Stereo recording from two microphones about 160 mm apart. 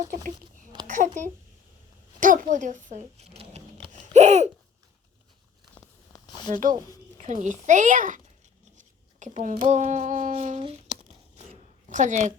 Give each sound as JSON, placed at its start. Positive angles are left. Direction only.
{"t": 0.0, "sound": "a child's voice", "side_deg": -55}
{"t": 2.2, "sound": "speech", "side_deg": -55}
{"t": 4.1, "sound": "a sound", "side_deg": -45}
{"t": 6.1, "sound": "a sound", "side_deg": 25}
{"t": 6.5, "sound": "speech", "side_deg": -55}
{"t": 11.9, "sound": "a woman's voice", "side_deg": -50}